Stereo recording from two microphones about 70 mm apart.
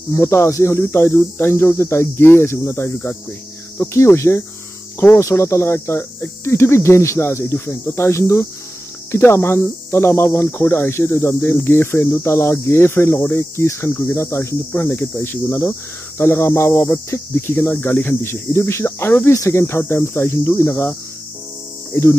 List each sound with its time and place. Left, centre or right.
0.1 s cricket: left
14.8 s cricket: left
16.2 s cricket: left